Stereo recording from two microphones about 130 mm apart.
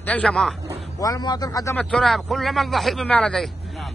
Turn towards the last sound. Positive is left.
turn(degrees=5)  # may be behind; listen again after turning